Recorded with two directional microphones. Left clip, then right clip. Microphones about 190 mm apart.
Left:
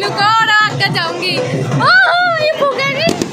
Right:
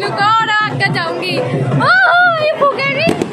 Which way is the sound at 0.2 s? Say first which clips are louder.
Left 2 dB; 15° left (ahead or behind).